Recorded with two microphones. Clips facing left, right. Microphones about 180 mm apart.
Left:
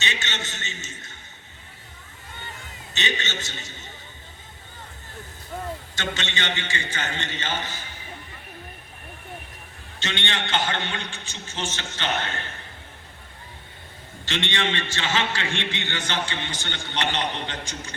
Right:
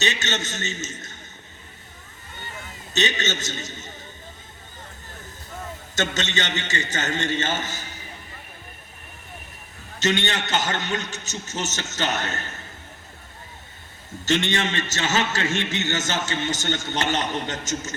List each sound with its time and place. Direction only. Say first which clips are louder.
0.0 s a man's voice: right 5 dB; 40° right (ahead or behind)
2.9 s a man's voice: right 5 dB; 40° right (ahead or behind)
5.9 s a man's voice: right 10 dB; 45° right (ahead or behind)
10.0 s a man's voice: right 6 dB; 40° right (ahead or behind)
14.3 s a man's voice: right 4 dB; 45° right (ahead or behind)